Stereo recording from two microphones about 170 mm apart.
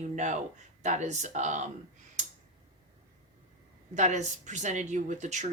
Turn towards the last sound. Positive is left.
turn(degrees=-45)  # may be behind; listen again after turning